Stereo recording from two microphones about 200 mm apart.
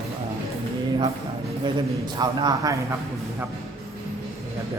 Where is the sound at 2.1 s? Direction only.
20° right (ahead or behind).